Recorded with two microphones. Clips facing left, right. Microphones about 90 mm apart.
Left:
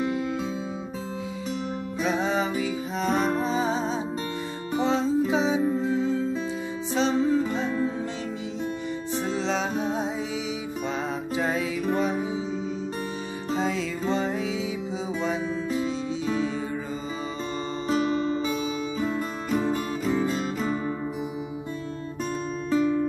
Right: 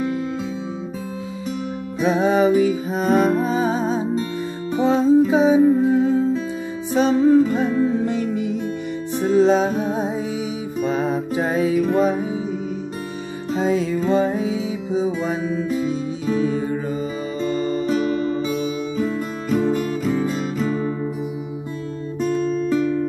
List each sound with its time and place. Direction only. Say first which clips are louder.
2.0 s music: right 8 dB; 55° right (ahead or behind)
13.6 s music: right 9 dB; 45° right (ahead or behind)
17.5 s music: right 9 dB; 55° right (ahead or behind)
18.9 s music: right 4 dB; 5° left (ahead or behind)
20.6 s music: right 5 dB; 15° left (ahead or behind)